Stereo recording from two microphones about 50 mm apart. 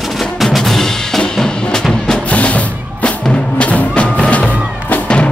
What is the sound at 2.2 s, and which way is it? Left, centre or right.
Music, left.